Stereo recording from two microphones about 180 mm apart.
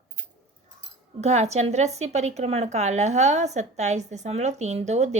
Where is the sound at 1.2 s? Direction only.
40° right (ahead or behind).